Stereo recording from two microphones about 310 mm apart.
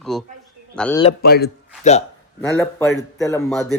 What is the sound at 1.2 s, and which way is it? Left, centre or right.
Speech, left.